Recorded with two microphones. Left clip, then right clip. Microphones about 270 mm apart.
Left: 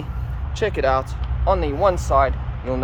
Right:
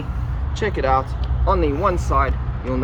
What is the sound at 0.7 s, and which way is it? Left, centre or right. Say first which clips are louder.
Speech: right 2 dB; left.